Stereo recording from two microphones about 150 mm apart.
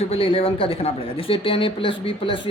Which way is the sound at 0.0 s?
40° left (ahead or behind).